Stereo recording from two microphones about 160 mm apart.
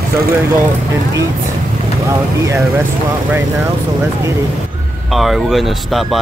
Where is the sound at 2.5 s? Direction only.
15° right (ahead or behind).